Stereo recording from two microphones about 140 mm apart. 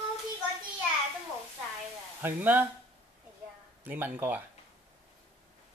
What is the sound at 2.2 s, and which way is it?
Speech, 10° right (ahead or behind).